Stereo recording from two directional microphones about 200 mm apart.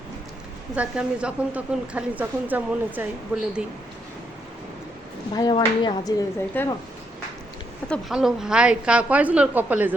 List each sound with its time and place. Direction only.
0.8 s a woman's voice: 5° right (ahead or behind)
5.3 s speech: 20° left (ahead or behind)
6.5 s speech: 10° left (ahead or behind)
7.9 s a woman's voice: centre (ahead or behind)